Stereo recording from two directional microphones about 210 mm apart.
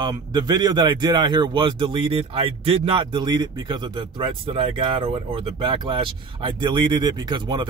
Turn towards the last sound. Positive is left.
turn(degrees=-20)  # may be behind; listen again after turning